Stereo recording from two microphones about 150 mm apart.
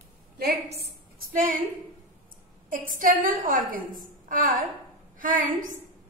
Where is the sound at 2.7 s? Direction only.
65° right (ahead or behind).